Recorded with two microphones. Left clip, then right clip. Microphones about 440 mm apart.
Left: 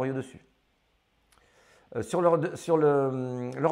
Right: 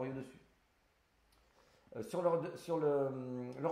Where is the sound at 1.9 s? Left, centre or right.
Left.